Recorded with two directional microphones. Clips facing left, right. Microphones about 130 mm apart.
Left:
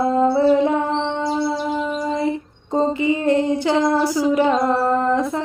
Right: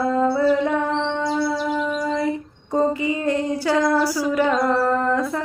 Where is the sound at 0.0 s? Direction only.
25° left (ahead or behind).